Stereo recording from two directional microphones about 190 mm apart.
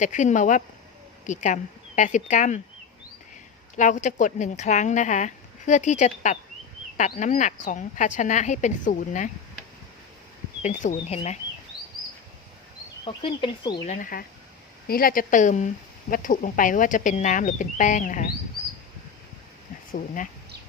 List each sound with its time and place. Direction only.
0.0 s speech: 40° left (ahead or behind)
3.8 s speech: 40° left (ahead or behind)
10.6 s speech: 40° left (ahead or behind)
11.7 s chirp: 30° right (ahead or behind)
13.1 s speech: 25° left (ahead or behind)
13.8 s speech: 45° left (ahead or behind)